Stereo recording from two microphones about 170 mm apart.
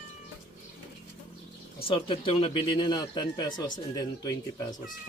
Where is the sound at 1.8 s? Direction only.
30° left (ahead or behind).